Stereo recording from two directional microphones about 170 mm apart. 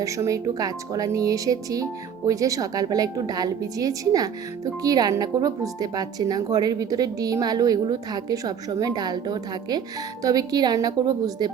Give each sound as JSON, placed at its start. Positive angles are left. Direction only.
{"t": 0.0, "sound": "speech", "side_deg": -20}